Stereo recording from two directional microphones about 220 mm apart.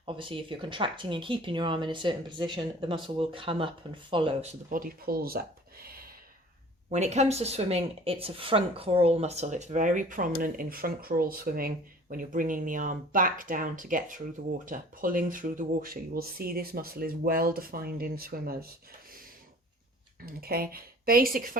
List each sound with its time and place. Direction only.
0.0 s speech: 25° right (ahead or behind); by 5.4 s 40° right (ahead or behind)
5.8 s a sound: 45° right (ahead or behind)
6.9 s speech: 30° right (ahead or behind)
20.2 s speech: 45° right (ahead or behind)